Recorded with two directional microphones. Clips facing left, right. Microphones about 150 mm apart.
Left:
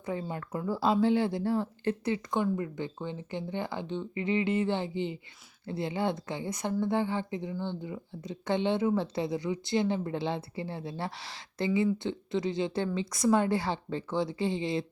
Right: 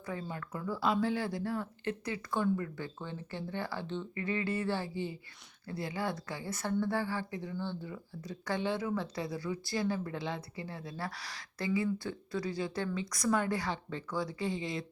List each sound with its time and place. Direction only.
0.0 s speech: 25° left (ahead or behind)